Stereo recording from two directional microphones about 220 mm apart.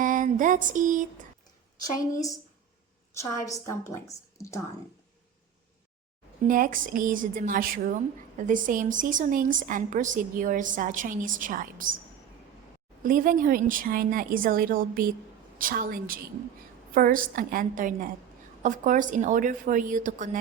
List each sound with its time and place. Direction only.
0.0 s a sound: 35° right (ahead or behind)
3.5 s a woman's voice: 15° left (ahead or behind)
6.5 s speech: 40° right (ahead or behind)
13.0 s speech: 40° right (ahead or behind)